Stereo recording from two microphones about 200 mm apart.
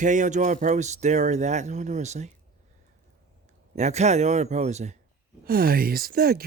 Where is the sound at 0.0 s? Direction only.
40° right (ahead or behind).